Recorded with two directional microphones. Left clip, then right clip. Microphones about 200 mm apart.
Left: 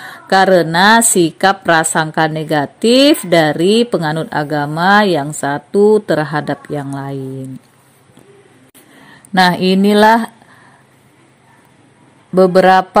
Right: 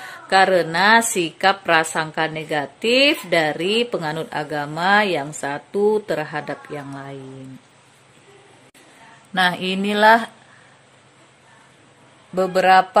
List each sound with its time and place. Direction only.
0.0 s a woman's voice: 35° left (ahead or behind)
9.3 s a woman's voice: 40° left (ahead or behind)
12.4 s a woman's voice: 35° left (ahead or behind)